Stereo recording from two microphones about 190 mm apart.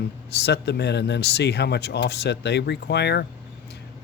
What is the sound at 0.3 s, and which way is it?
Speech, 60° left (ahead or behind).